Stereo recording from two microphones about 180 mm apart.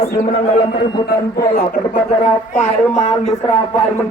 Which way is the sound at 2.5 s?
40° left (ahead or behind).